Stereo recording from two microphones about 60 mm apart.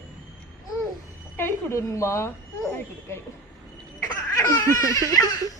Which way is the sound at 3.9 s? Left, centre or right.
Left.